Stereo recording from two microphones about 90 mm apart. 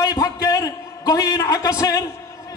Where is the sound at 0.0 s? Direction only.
40° left (ahead or behind).